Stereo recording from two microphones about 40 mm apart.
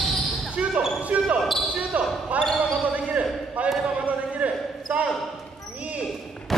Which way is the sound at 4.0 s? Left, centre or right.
Right.